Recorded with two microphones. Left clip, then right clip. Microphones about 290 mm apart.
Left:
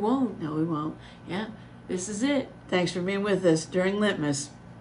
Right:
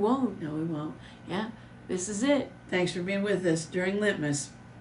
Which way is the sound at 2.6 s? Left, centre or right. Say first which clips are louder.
Left 3 dB; centre.